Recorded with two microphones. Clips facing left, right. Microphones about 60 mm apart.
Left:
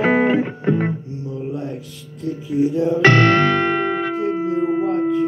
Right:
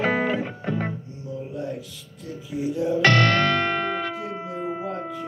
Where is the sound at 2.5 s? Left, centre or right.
Left.